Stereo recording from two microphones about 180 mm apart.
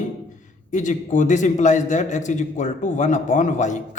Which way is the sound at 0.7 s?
45° left (ahead or behind).